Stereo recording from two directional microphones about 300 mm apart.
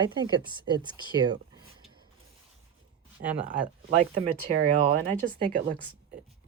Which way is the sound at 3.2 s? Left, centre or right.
Right.